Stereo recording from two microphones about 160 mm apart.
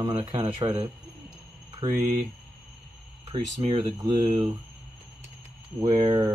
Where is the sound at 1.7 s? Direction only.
25° right (ahead or behind).